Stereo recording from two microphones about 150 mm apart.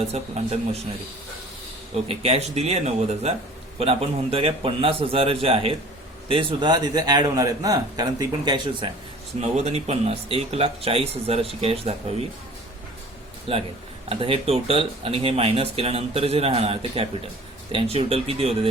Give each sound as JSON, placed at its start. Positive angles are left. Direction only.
{"t": 0.1, "sound": "speech", "side_deg": -45}
{"t": 2.0, "sound": "speech", "side_deg": -40}
{"t": 9.4, "sound": "speech", "side_deg": -45}
{"t": 13.5, "sound": "speech", "side_deg": -40}